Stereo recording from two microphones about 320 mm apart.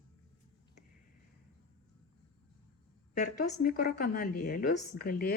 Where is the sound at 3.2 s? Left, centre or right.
Left.